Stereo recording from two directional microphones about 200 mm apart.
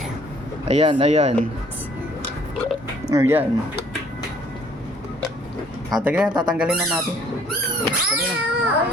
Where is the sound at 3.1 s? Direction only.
10° right (ahead or behind).